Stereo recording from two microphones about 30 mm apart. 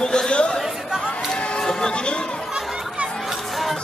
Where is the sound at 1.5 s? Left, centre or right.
Left.